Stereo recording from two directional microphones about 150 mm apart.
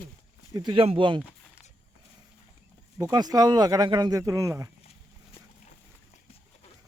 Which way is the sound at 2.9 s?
25° right (ahead or behind).